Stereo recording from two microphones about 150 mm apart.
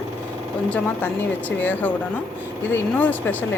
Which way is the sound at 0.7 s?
10° left (ahead or behind).